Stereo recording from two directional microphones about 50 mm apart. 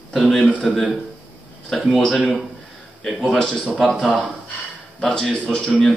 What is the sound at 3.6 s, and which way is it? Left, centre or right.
Speech, centre.